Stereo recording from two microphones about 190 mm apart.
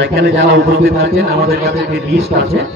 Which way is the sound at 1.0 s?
55° right (ahead or behind).